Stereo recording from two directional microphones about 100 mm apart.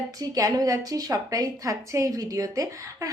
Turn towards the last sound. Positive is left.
turn(degrees=-35)  # may be behind; listen again after turning